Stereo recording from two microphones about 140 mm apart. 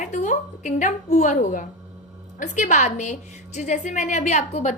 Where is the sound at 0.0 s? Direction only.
65° left (ahead or behind).